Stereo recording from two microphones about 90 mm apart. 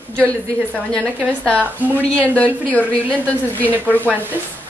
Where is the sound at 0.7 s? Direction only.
10° left (ahead or behind).